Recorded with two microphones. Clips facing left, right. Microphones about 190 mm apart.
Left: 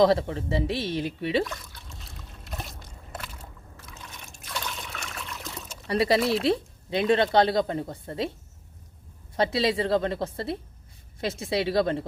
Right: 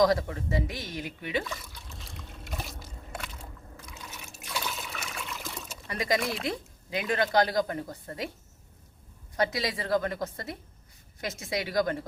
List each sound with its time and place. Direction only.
0.0 s speech: 25° left (ahead or behind)
1.5 s trickle: centre (ahead or behind)
3.8 s liquid: centre (ahead or behind)
5.9 s speech: 30° left (ahead or behind)
9.3 s speech: 30° left (ahead or behind)